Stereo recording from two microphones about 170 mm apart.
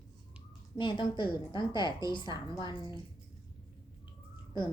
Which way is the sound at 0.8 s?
30° left (ahead or behind).